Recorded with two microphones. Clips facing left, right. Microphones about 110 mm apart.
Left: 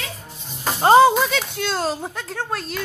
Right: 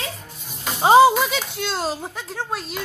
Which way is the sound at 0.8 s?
5° right (ahead or behind).